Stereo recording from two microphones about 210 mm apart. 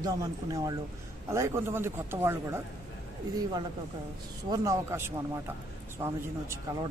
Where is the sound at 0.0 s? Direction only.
15° right (ahead or behind).